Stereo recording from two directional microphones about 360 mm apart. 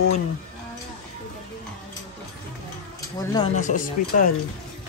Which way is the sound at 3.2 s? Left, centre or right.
Centre.